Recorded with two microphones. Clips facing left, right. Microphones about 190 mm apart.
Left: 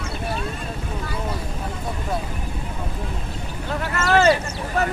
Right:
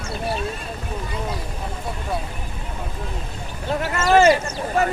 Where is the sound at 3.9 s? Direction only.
15° right (ahead or behind).